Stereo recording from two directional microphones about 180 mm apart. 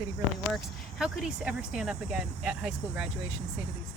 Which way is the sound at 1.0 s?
5° right (ahead or behind).